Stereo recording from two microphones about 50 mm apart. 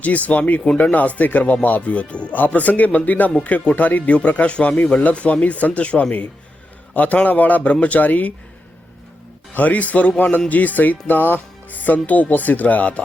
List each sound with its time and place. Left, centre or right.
0.0 s speech: left
9.6 s speech: left